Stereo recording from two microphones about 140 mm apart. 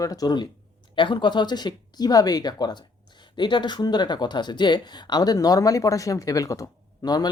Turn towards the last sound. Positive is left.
turn(degrees=30)  # may be behind; listen again after turning